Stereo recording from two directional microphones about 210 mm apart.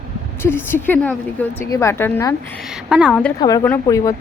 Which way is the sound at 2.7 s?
5° right (ahead or behind).